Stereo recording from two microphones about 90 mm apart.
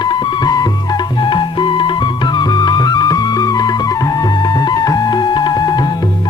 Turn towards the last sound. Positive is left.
turn(degrees=50)  # may be behind; listen again after turning